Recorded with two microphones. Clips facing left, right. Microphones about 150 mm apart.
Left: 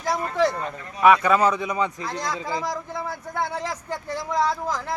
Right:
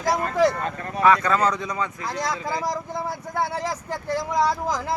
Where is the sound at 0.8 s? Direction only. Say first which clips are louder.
Right 8 dB; 60° right (ahead or behind).